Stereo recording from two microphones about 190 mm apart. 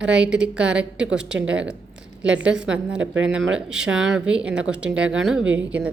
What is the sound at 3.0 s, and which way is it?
Speech, 80° right.